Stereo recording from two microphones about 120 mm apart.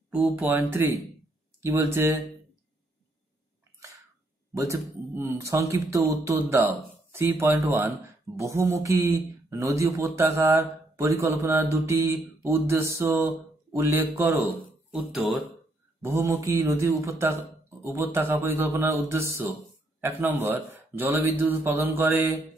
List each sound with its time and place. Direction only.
0.1 s a man's voice: 15° right (ahead or behind)
4.6 s speech: 25° right (ahead or behind)
16.0 s a man's voice: 20° right (ahead or behind)